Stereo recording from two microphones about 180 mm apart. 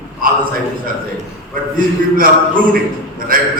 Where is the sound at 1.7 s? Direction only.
50° right (ahead or behind).